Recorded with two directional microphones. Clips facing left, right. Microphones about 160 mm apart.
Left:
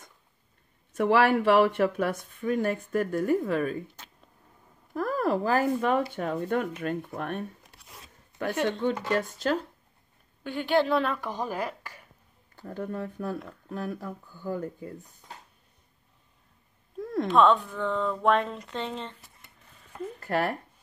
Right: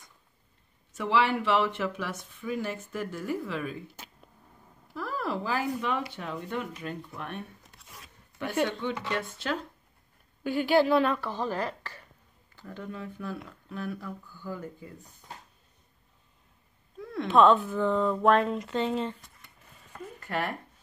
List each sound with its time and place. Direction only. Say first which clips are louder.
0.9 s speech: left 4 dB; 50° left (ahead or behind)
4.9 s speech: left 6 dB; 45° left (ahead or behind)
8.3 s a sound: left 3 dB; 20° left (ahead or behind)
8.6 s speech: left 5 dB; 40° left (ahead or behind)
10.4 s speech: right 2 dB; 5° right (ahead or behind)
11.1 s speech: even; 15° left (ahead or behind)
12.5 s speech: left 6 dB; 45° left (ahead or behind)
17.0 s a sound: left 5 dB; 40° left (ahead or behind)
17.3 s speech: right 1 dB; centre (ahead or behind)
20.2 s speech: left 4 dB; 40° left (ahead or behind)